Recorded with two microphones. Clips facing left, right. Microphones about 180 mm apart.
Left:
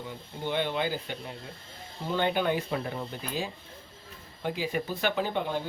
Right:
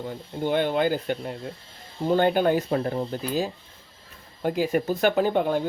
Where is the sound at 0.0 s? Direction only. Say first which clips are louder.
Right 7 dB; 45° right (ahead or behind).